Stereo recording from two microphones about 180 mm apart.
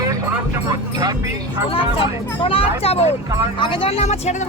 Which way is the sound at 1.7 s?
30° left (ahead or behind).